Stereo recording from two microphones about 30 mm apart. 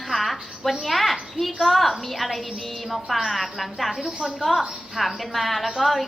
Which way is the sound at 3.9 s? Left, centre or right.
Centre.